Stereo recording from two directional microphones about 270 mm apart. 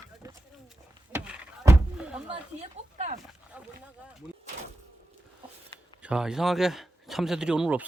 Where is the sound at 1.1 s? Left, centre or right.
Centre.